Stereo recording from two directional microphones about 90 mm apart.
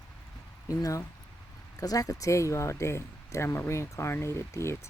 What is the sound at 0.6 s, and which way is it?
Speech, 40° left (ahead or behind).